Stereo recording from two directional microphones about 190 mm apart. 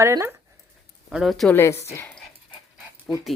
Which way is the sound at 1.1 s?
Centre (ahead or behind).